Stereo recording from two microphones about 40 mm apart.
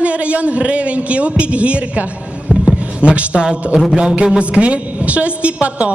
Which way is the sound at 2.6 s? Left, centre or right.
Right.